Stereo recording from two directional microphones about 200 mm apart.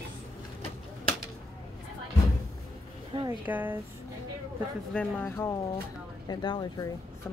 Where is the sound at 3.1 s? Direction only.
10° right (ahead or behind).